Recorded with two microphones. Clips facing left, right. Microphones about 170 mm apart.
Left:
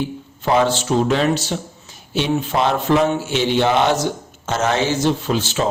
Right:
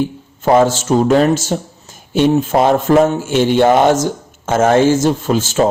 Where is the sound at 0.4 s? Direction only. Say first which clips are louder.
Right 5 dB; 45° right (ahead or behind).